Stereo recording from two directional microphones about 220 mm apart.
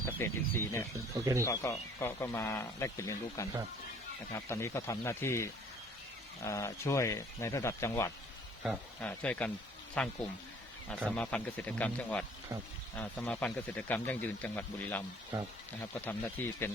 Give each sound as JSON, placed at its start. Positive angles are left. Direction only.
{"t": 0.0, "sound": "speech", "side_deg": 10}
{"t": 1.1, "sound": "speech", "side_deg": -15}
{"t": 1.5, "sound": "speech", "side_deg": 15}
{"t": 15.3, "sound": "speech", "side_deg": -15}
{"t": 15.8, "sound": "speech", "side_deg": 10}